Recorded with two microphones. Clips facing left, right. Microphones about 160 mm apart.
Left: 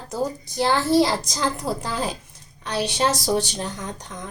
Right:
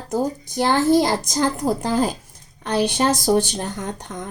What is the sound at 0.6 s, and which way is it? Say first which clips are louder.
A child's voice: right 2 dB; 50° right (ahead or behind).